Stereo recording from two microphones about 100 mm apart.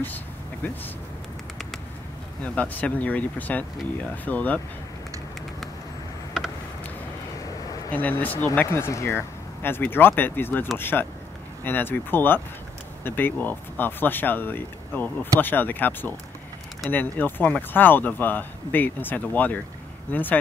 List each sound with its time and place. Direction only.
2.4 s speech: 15° left (ahead or behind)
7.9 s speech: 15° left (ahead or behind)